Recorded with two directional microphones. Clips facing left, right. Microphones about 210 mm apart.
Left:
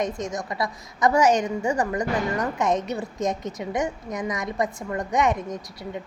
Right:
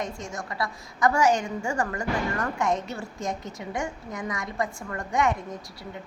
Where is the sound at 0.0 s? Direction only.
20° left (ahead or behind).